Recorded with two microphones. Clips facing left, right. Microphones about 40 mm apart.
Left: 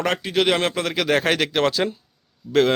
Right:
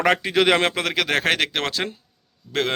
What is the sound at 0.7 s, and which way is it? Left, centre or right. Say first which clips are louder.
Speech: left 1 dB; right.